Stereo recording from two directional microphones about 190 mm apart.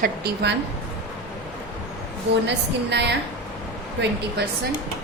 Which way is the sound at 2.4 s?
65° right (ahead or behind).